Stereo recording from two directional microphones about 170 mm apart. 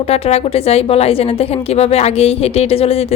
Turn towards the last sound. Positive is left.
turn(degrees=35)  # may be behind; listen again after turning